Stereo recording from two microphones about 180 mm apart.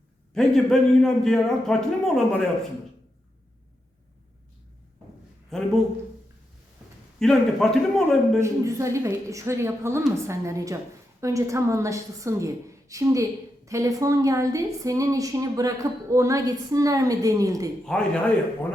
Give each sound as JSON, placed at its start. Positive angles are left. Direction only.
{"t": 0.3, "sound": "a man's voice", "side_deg": 0}
{"t": 5.5, "sound": "speech", "side_deg": 0}
{"t": 7.2, "sound": "a man's voice", "side_deg": 0}
{"t": 8.4, "sound": "speech", "side_deg": -15}
{"t": 17.8, "sound": "a man's voice", "side_deg": 5}